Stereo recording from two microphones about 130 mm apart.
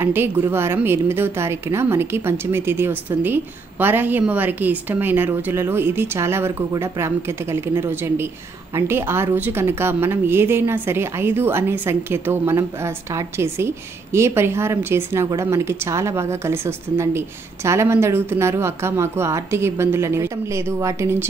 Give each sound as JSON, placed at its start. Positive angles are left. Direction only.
{"t": 0.0, "sound": "a woman's voice", "side_deg": -20}